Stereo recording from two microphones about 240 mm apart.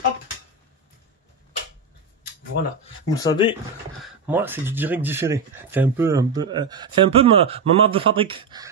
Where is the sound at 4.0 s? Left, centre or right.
Centre.